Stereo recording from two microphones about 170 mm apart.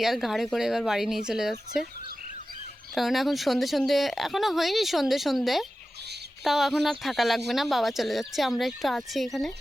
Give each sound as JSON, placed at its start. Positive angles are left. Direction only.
{"t": 0.0, "sound": "a woman's voice", "side_deg": 0}
{"t": 2.9, "sound": "a woman's voice", "side_deg": 0}